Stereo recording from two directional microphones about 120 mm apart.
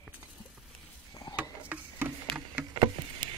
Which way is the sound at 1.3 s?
15° right (ahead or behind).